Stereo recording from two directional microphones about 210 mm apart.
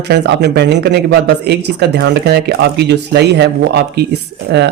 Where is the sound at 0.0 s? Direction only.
55° right (ahead or behind).